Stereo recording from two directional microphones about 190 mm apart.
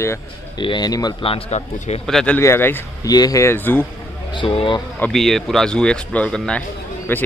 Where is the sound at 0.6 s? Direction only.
25° left (ahead or behind).